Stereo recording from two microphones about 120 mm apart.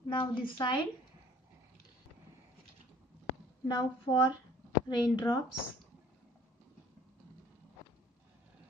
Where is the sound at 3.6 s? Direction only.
35° left (ahead or behind).